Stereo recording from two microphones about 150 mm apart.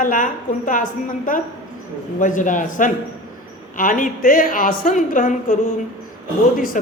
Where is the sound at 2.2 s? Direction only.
60° left (ahead or behind).